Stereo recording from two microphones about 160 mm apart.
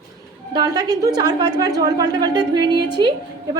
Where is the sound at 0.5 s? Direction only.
25° right (ahead or behind).